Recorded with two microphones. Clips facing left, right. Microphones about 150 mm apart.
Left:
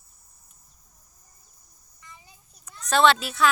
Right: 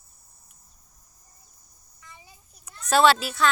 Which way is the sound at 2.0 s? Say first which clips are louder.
Even; centre (ahead or behind).